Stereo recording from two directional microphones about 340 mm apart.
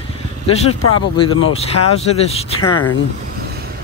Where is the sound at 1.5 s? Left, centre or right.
Centre.